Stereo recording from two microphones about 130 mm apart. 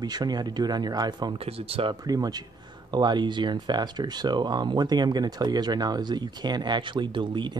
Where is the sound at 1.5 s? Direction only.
45° right (ahead or behind).